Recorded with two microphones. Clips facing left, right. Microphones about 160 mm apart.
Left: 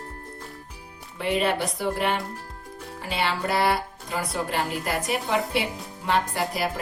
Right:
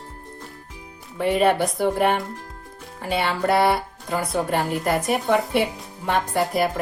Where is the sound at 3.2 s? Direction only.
55° right (ahead or behind).